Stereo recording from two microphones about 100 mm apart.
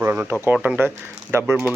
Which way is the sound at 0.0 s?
20° right (ahead or behind).